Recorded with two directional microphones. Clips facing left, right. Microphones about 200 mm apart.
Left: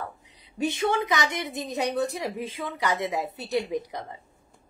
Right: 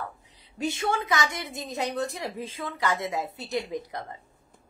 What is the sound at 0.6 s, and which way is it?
A woman's voice, 20° left (ahead or behind).